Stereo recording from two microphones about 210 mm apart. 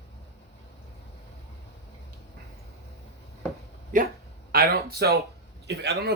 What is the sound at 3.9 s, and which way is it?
Speech, 40° right (ahead or behind).